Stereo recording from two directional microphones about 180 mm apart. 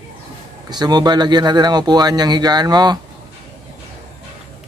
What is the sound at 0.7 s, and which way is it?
Speech, 25° right (ahead or behind).